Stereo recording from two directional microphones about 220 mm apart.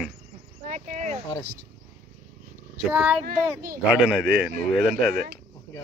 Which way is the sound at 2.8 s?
5° right (ahead or behind).